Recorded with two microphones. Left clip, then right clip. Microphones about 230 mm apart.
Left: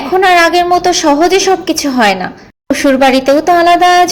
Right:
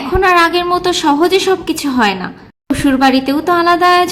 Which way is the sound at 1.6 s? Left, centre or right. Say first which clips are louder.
Left 4 dB; centre.